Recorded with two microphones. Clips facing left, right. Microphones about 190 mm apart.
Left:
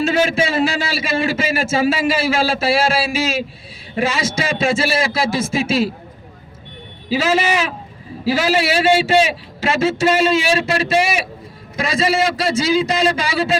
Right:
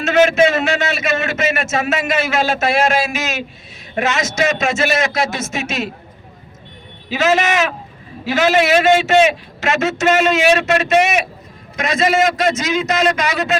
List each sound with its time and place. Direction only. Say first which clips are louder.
0.0 s a man's voice: right 4 dB; 30° left (ahead or behind)
7.1 s a man's voice: right 1 dB; 30° left (ahead or behind)